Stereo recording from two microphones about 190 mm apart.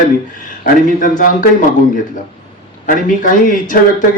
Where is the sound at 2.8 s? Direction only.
45° left (ahead or behind).